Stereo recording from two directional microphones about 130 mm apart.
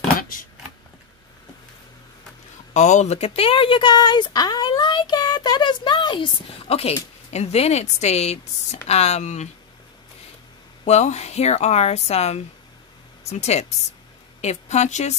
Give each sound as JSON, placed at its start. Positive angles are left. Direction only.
{"t": 0.2, "sound": "a sound", "side_deg": 90}
{"t": 2.7, "sound": "speech", "side_deg": 65}
{"t": 10.9, "sound": "speech", "side_deg": 60}